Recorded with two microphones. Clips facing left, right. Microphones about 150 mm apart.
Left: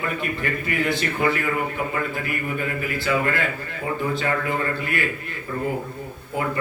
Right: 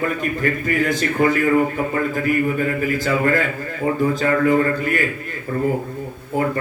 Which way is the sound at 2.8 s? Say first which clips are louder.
Right 4 dB; 40° right (ahead or behind).